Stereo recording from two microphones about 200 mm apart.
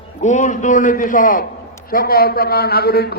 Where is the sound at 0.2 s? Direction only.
35° left (ahead or behind).